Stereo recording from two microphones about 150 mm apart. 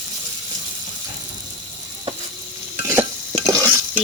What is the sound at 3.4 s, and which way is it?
Stir, 15° right (ahead or behind).